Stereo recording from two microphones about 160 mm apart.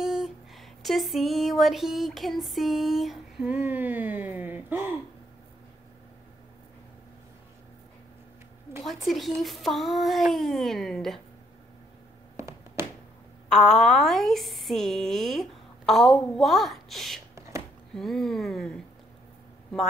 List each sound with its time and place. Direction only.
0.0 s speech: centre (ahead or behind)
8.8 s speech: centre (ahead or behind)
12.4 s a sound: 15° right (ahead or behind)
13.5 s speech: centre (ahead or behind)
17.4 s a sound: 20° right (ahead or behind)
17.9 s speech: centre (ahead or behind)